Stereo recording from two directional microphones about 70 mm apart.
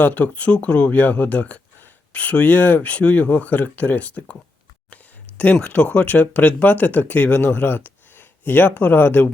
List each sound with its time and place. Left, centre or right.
0.0 s speech: left
4.9 s a sound: left
5.6 s speech: left